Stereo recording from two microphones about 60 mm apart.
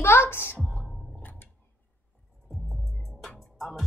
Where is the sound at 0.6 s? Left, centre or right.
Centre.